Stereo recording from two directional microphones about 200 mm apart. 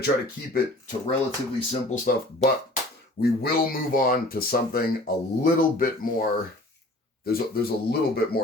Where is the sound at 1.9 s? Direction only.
40° left (ahead or behind).